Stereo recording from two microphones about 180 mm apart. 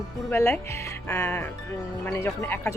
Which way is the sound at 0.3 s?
15° left (ahead or behind).